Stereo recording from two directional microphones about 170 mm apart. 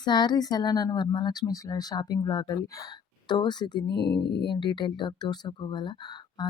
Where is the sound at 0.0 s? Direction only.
25° left (ahead or behind).